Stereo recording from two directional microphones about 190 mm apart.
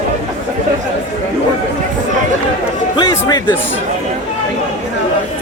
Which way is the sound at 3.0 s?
25° left (ahead or behind).